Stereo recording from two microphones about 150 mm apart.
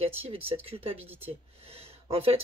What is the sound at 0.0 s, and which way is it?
Speech, 40° right (ahead or behind).